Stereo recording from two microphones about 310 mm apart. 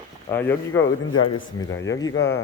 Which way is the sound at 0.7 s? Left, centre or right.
Left.